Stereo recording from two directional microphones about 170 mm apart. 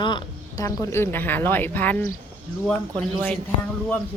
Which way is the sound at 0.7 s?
15° left (ahead or behind).